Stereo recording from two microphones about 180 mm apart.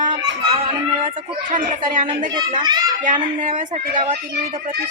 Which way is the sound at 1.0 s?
45° right (ahead or behind).